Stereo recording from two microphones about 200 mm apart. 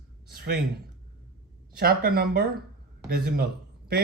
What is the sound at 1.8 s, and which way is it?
A woman's voice, 50° right (ahead or behind).